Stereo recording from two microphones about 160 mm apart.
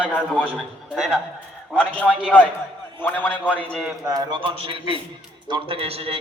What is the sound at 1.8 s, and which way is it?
A man's voice, 10° left (ahead or behind).